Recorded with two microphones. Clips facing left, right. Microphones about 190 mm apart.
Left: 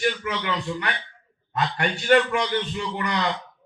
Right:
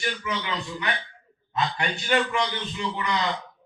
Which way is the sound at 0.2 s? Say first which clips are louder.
Left 1 dB; 60° left (ahead or behind).